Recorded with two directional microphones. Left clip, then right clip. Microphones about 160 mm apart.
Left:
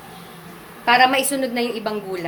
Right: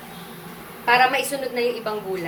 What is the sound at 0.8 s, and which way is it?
A woman's voice, 90° left.